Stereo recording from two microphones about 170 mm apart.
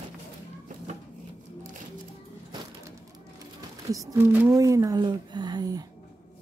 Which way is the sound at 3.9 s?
15° right (ahead or behind).